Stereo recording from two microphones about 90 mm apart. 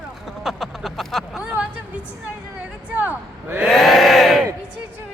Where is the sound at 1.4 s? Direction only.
15° right (ahead or behind).